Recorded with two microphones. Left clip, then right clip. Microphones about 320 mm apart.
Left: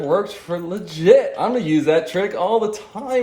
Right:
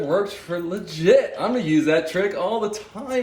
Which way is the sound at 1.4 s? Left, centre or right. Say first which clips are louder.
Left 2 dB; left.